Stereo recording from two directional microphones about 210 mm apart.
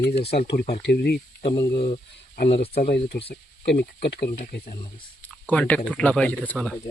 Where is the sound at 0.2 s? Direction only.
50° left (ahead or behind).